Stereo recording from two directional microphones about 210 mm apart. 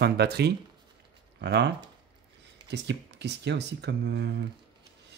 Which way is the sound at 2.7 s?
55° right (ahead or behind).